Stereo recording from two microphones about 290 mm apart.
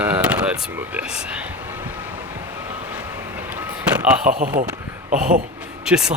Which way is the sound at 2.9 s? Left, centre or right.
Centre.